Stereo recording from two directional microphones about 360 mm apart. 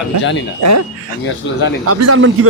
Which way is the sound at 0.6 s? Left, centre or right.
Right.